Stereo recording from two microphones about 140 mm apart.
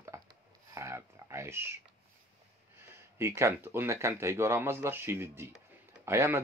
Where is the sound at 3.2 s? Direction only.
15° right (ahead or behind).